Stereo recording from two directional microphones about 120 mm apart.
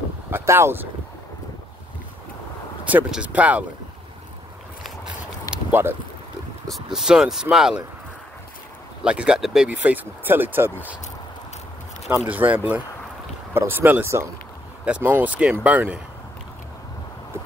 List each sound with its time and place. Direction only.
0.3 s speech: 20° right (ahead or behind)
2.9 s speech: 10° right (ahead or behind)
5.7 s speech: 20° right (ahead or behind)
6.7 s speech: 5° right (ahead or behind)
9.0 s speech: 10° right (ahead or behind)
12.3 s speech: 15° right (ahead or behind)